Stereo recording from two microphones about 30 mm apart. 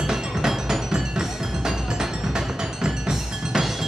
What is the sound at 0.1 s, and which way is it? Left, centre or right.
Music, centre.